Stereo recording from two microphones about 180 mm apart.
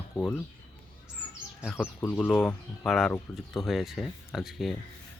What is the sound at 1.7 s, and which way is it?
Speech, 10° left (ahead or behind).